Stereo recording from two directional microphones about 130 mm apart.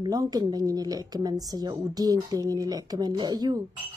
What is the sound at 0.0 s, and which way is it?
Speech, 30° right (ahead or behind).